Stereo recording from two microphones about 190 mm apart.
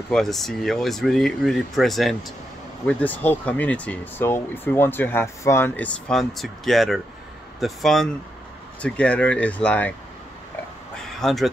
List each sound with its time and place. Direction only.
0.1 s speech: centre (ahead or behind)
11.1 s speech: centre (ahead or behind)